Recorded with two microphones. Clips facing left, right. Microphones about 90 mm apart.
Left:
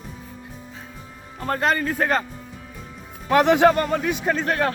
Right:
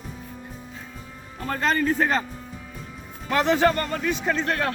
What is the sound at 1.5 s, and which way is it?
Speech, 45° left (ahead or behind).